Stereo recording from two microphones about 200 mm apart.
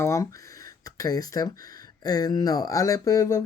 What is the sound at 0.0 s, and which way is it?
Speech, 15° left (ahead or behind).